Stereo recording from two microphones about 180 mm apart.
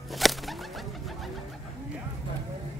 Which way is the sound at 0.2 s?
Centre (ahead or behind).